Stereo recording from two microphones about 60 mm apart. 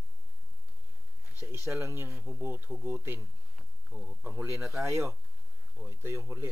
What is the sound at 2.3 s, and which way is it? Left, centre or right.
Speech, right.